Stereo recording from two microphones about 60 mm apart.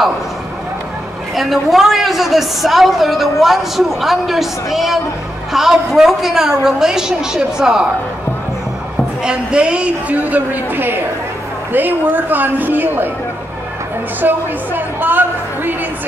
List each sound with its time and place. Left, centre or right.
1.3 s a woman's voice: centre
9.2 s a woman's voice: centre; by 13.1 s right
14.2 s a sound: right